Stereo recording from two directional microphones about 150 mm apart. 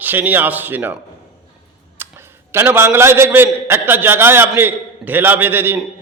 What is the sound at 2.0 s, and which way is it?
A man's voice, 15° right (ahead or behind).